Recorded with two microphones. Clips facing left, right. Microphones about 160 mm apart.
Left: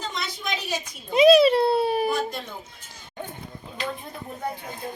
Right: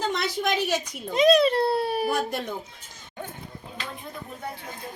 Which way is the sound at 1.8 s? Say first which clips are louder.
Left 3 dB; centre (ahead or behind).